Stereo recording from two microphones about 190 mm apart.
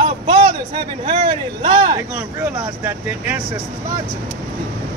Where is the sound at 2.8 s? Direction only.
10° right (ahead or behind).